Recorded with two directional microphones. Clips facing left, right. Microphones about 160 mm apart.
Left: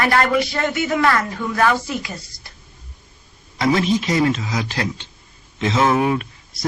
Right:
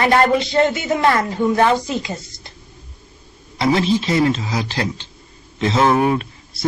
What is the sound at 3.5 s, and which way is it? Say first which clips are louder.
A man's voice: right 1 dB; 30° right (ahead or behind).